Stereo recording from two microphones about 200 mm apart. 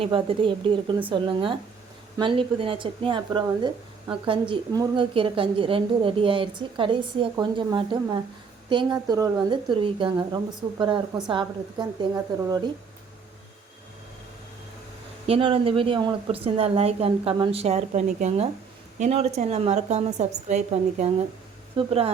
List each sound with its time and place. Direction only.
0.0 s a woman's voice: 25° right (ahead or behind)
15.3 s a woman's voice: 25° right (ahead or behind)